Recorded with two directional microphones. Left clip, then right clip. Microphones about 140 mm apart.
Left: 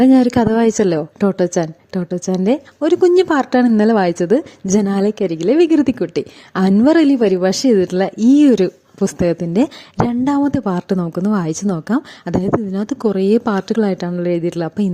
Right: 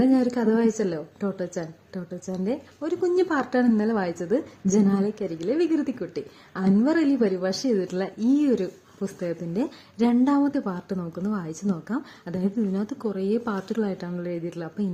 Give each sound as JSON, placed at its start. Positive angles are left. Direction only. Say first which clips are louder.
{"t": 0.0, "sound": "a woman's voice", "louder": "left 10 dB", "side_deg": 65}